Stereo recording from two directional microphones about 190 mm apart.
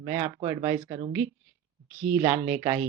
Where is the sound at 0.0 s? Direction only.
20° right (ahead or behind).